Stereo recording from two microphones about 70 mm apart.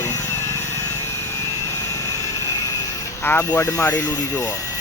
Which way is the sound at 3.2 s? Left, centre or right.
Left.